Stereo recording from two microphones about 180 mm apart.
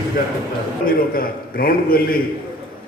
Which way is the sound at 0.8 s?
55° left (ahead or behind).